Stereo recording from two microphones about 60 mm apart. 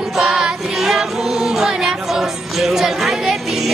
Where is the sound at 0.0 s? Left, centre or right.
Centre.